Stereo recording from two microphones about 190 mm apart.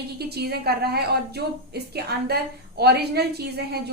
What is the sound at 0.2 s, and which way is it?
A woman's voice, 55° right (ahead or behind).